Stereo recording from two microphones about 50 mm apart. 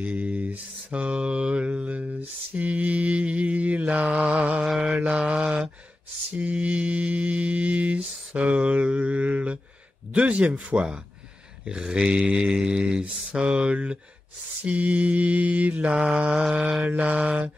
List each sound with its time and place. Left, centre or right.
0.0 s mantra: right
10.1 s speech: right
11.6 s mantra: centre
13.3 s speech: right
14.6 s mantra: right
15.9 s speech: right